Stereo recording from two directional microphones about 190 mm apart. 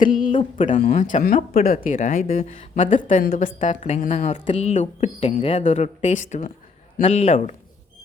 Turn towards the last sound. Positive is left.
turn(degrees=35)  # may be behind; listen again after turning